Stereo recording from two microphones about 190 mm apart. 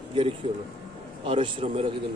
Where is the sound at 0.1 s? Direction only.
30° right (ahead or behind).